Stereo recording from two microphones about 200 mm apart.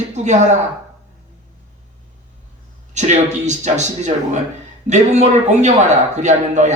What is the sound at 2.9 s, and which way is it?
A man's voice, 35° right (ahead or behind).